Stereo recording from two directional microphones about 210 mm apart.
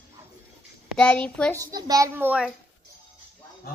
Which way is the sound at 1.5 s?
15° right (ahead or behind).